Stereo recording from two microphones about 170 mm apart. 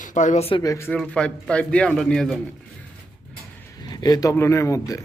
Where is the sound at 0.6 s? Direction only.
15° left (ahead or behind).